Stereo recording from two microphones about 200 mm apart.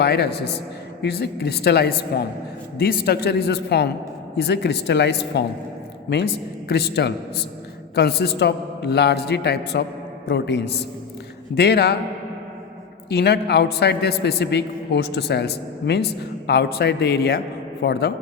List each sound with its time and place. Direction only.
0.0 s a man's voice: 55° left (ahead or behind)
6.7 s a man's voice: 55° left (ahead or behind)
13.1 s a man's voice: 55° left (ahead or behind)